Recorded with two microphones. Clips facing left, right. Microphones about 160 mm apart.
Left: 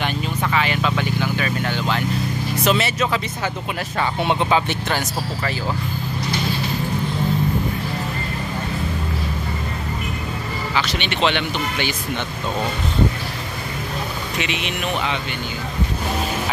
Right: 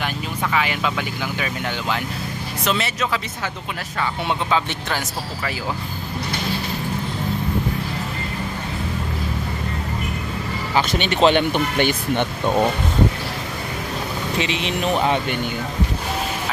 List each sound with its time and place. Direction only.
0.6 s speech: 10° right (ahead or behind)
2.6 s speech: 5° left (ahead or behind)
4.3 s speech: 15° left (ahead or behind)
10.7 s speech: 45° right (ahead or behind)
14.4 s speech: 30° right (ahead or behind)